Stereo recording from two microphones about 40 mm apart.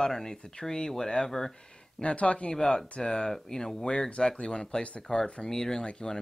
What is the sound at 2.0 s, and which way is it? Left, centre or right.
Speech, left.